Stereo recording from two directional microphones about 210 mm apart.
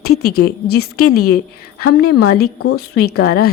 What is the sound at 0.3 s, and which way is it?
Speech, 50° left (ahead or behind).